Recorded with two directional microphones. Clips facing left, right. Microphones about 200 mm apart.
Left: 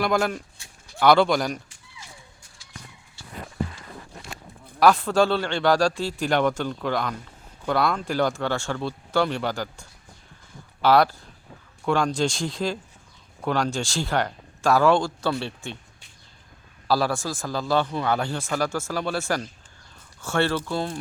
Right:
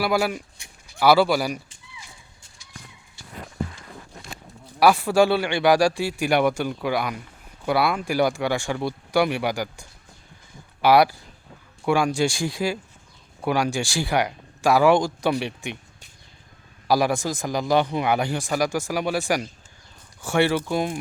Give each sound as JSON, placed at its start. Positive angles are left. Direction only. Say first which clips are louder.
{"t": 0.0, "sound": "speech", "louder": "right 1 dB", "side_deg": -5}
{"t": 4.8, "sound": "speech", "louder": "right 1 dB", "side_deg": -10}
{"t": 10.8, "sound": "speech", "louder": "right 2 dB", "side_deg": -10}
{"t": 16.9, "sound": "speech", "louder": "right 2 dB", "side_deg": -15}